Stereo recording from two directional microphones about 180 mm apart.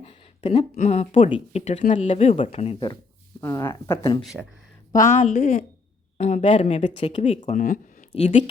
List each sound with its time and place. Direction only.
0.0 s speech: 35° left (ahead or behind)
3.4 s speech: 15° left (ahead or behind)
4.2 s speech: centre (ahead or behind)
4.9 s speech: 45° left (ahead or behind)